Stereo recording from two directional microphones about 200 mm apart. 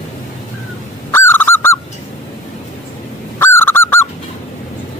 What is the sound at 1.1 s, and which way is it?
Goose, 10° left (ahead or behind).